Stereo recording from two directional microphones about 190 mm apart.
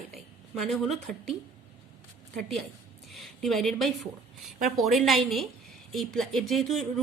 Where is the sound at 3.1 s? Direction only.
Centre (ahead or behind).